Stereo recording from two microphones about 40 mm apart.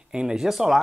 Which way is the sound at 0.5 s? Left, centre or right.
Centre.